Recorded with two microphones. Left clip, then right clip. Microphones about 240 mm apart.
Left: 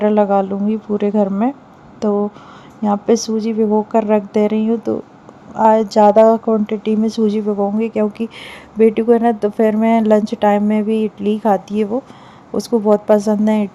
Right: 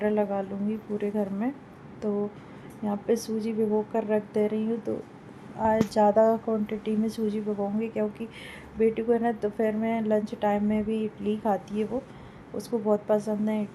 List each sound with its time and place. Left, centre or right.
0.0 s speech: left